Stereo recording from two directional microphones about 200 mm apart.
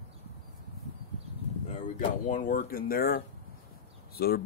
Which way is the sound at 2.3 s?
40° left (ahead or behind).